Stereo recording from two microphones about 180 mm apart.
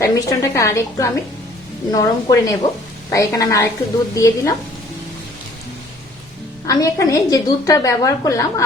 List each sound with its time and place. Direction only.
0.0 s a woman's voice: 15° left (ahead or behind)
6.7 s a woman's voice: 20° left (ahead or behind)